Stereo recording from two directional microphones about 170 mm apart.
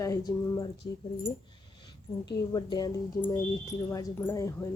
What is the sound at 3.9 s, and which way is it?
Speech, 15° left (ahead or behind).